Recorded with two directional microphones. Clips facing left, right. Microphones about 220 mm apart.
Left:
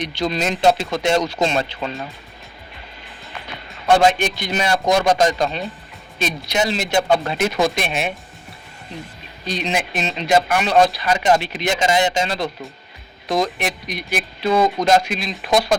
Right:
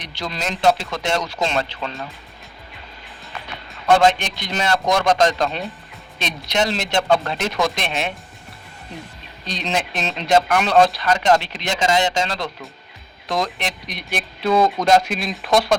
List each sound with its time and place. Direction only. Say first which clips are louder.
0.1 s speech: left 1 dB; 20° left (ahead or behind)
3.9 s speech: left 1 dB; 10° left (ahead or behind)
9.5 s speech: left 2 dB; 5° left (ahead or behind)